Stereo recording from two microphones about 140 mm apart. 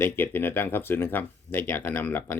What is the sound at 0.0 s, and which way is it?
Speech, 15° left (ahead or behind).